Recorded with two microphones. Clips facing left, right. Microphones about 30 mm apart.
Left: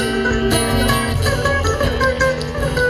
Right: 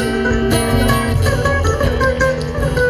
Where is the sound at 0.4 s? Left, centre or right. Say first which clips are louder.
Right 1 dB; centre.